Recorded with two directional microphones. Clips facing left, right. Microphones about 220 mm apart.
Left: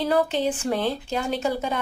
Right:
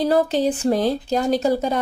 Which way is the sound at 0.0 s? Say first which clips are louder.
Right 4 dB; 40° right (ahead or behind).